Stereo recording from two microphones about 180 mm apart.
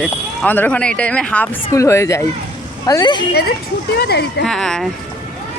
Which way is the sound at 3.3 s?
60° left (ahead or behind).